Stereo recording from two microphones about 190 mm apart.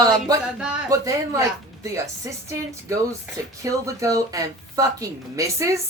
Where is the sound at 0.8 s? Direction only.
15° right (ahead or behind).